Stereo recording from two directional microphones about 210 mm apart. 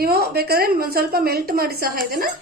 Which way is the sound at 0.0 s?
45° right (ahead or behind).